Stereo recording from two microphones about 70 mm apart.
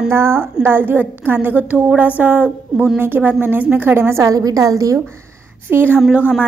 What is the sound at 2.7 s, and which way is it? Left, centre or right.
Speech, centre.